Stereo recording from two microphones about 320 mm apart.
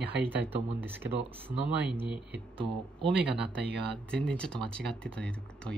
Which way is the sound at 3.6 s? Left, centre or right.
Right.